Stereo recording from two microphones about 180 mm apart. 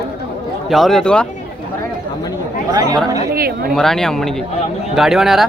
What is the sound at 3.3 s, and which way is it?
Speech, 55° right (ahead or behind).